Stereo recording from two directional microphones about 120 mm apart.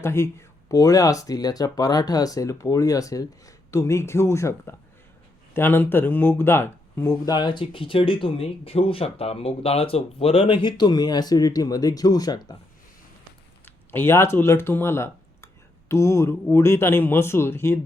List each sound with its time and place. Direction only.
0.0 s speech: 20° left (ahead or behind)
7.3 s speech: 35° left (ahead or behind)
13.7 s speech: 20° left (ahead or behind)